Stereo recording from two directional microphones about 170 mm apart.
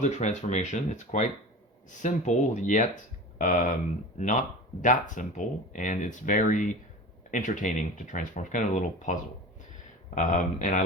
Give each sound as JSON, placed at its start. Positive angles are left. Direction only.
{"t": 0.0, "sound": "speech", "side_deg": 45}
{"t": 4.8, "sound": "speech", "side_deg": 50}
{"t": 10.2, "sound": "speech", "side_deg": 50}